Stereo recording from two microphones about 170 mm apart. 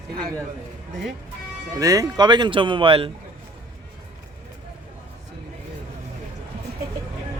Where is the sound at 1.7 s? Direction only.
20° right (ahead or behind).